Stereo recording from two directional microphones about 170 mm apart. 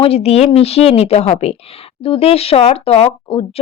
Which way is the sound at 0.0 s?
35° left (ahead or behind).